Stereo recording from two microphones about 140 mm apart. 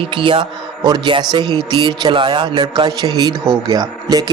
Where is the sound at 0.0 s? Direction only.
40° right (ahead or behind).